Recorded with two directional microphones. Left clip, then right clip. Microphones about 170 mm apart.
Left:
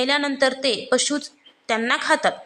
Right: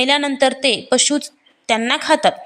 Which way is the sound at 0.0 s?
25° right (ahead or behind).